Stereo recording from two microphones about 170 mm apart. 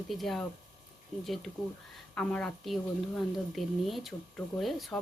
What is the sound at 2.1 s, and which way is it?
A woman's voice, 5° left (ahead or behind).